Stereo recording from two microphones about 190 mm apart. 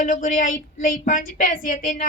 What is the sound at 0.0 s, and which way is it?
A woman's voice, 45° left (ahead or behind).